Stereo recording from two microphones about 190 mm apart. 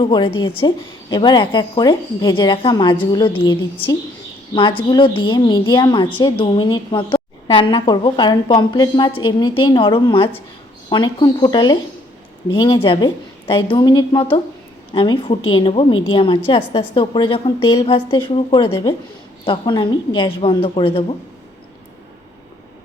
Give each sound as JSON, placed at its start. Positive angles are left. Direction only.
{"t": 0.0, "sound": "a woman's voice", "side_deg": 25}